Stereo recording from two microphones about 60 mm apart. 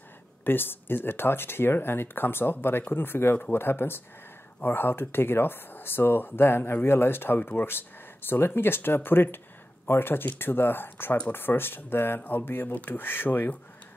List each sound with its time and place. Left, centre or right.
0.4 s speech: left